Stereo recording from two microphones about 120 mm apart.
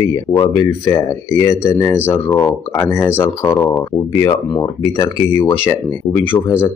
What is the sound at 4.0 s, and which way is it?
Speech, 30° left (ahead or behind).